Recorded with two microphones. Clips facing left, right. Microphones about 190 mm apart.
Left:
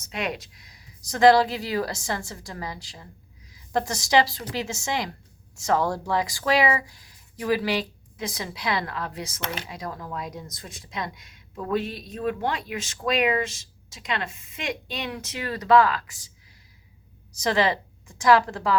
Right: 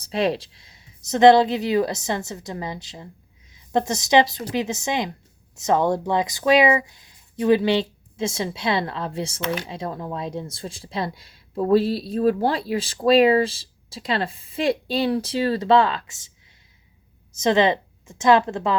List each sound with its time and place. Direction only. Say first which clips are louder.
0.0 s a woman's voice: right 8 dB; 30° right (ahead or behind)
17.3 s speech: right 5 dB; 20° right (ahead or behind)